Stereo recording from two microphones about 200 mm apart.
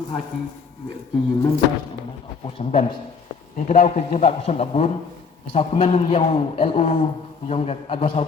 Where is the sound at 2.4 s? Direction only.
30° left (ahead or behind).